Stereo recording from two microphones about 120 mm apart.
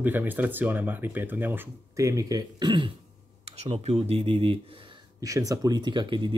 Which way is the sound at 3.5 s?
60° right (ahead or behind).